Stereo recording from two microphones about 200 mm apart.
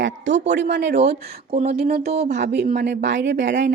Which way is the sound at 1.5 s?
30° right (ahead or behind).